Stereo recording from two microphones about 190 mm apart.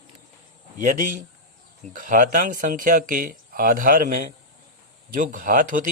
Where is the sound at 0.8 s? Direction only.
45° right (ahead or behind).